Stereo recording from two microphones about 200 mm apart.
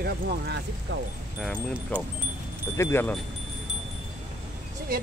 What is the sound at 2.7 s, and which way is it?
Speech, 10° left (ahead or behind).